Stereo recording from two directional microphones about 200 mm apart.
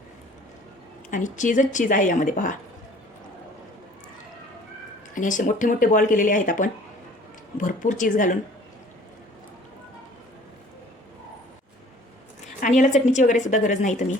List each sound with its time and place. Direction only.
1.1 s speech: 40° left (ahead or behind)
5.1 s speech: 40° left (ahead or behind)
12.5 s speech: 40° left (ahead or behind)